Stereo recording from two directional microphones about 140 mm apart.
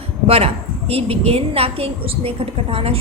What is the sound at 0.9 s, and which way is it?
A woman's voice, 45° right (ahead or behind).